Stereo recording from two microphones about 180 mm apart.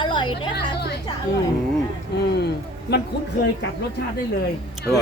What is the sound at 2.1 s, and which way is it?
Speech, 70° left (ahead or behind).